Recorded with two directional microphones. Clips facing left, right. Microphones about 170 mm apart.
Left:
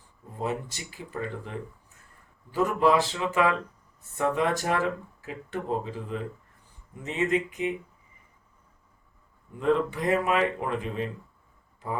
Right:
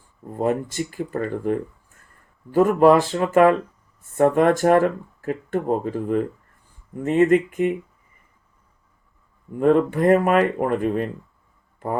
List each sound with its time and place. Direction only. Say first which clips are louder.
0.3 s speech: right 9 dB; 50° right (ahead or behind)
9.6 s speech: right 8 dB; 50° right (ahead or behind)